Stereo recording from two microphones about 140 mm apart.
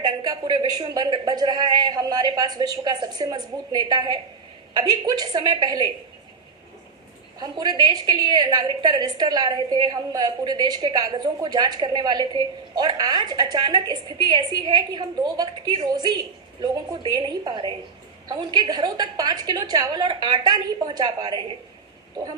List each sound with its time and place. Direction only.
0.0 s a woman's voice: 30° right (ahead or behind)
7.3 s a woman's voice: 30° right (ahead or behind)